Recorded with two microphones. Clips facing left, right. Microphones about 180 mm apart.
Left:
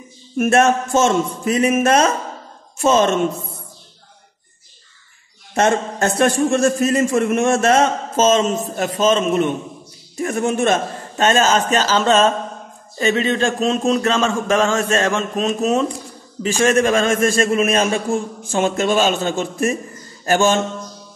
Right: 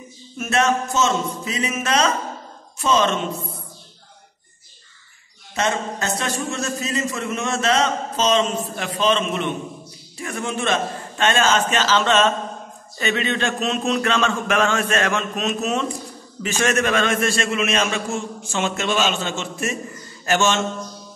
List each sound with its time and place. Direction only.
0.4 s a man's voice: 50° left (ahead or behind)
5.5 s a man's voice: 50° left (ahead or behind)